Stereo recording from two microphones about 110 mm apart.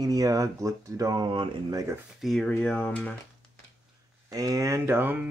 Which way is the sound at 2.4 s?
10° left (ahead or behind).